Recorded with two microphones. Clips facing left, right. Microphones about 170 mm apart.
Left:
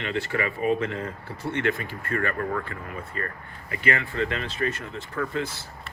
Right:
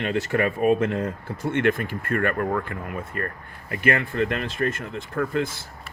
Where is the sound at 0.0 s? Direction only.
45° right (ahead or behind).